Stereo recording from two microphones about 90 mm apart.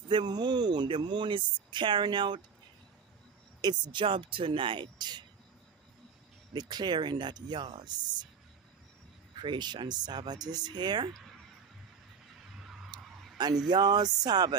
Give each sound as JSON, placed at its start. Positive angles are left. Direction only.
{"t": 0.1, "sound": "a sound", "side_deg": -50}
{"t": 1.0, "sound": "speech", "side_deg": -60}
{"t": 3.6, "sound": "speech", "side_deg": -65}
{"t": 6.5, "sound": "speech", "side_deg": -50}
{"t": 9.4, "sound": "speech", "side_deg": -60}
{"t": 12.9, "sound": "a sound", "side_deg": -50}
{"t": 13.7, "sound": "speech", "side_deg": -50}